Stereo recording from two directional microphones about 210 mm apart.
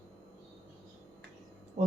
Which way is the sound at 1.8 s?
35° right (ahead or behind).